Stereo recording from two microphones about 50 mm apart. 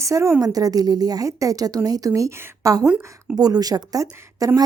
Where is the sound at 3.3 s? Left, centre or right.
Right.